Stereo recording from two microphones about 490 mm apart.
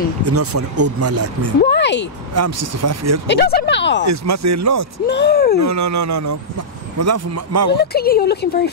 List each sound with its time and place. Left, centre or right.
0.2 s speech: right
1.6 s a woman's voice: left
2.3 s speech: right
3.3 s a woman's voice: centre
4.0 s speech: right
5.0 s a woman's voice: centre
5.6 s speech: right
7.7 s a woman's voice: centre